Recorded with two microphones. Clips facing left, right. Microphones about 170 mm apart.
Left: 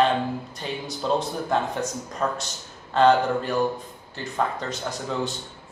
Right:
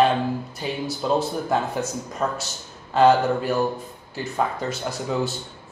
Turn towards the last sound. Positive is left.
turn(degrees=-10)  # may be behind; listen again after turning